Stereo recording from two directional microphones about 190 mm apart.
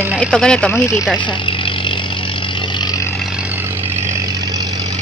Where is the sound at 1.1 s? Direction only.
25° left (ahead or behind).